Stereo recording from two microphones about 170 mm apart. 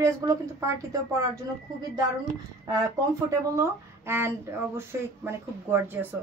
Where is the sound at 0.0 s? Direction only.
20° right (ahead or behind).